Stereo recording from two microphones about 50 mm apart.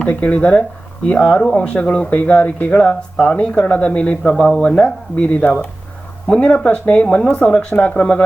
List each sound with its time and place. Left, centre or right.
0.0 s speech: left
4.2 s speech: centre
4.8 s speech: left